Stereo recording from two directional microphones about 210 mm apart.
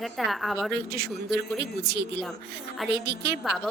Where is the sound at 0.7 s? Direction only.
50° right (ahead or behind).